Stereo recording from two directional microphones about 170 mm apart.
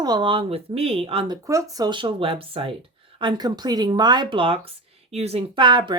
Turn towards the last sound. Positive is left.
turn(degrees=-25)  # may be behind; listen again after turning